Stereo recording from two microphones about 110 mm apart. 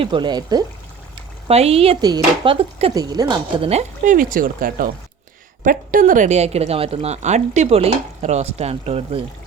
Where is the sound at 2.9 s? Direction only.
35° right (ahead or behind).